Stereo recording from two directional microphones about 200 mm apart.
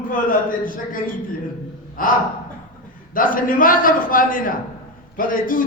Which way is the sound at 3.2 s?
45° left (ahead or behind).